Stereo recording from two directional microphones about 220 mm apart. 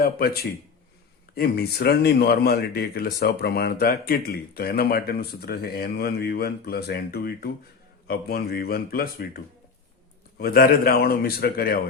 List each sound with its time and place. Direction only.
0.0 s speech: 45° left (ahead or behind)